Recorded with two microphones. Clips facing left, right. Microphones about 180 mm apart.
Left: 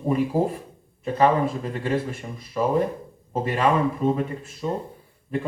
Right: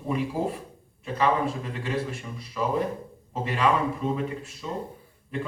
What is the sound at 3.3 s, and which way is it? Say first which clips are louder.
A man's voice: left 3 dB; 45° left (ahead or behind).